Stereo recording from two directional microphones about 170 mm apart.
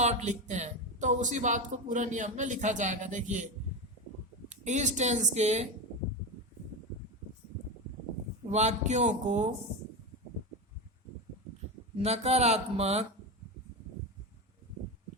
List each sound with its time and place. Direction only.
0.0 s speech: 45° right (ahead or behind)
4.4 s speech: 45° right (ahead or behind)
8.4 s speech: 40° right (ahead or behind)
11.9 s speech: 40° right (ahead or behind)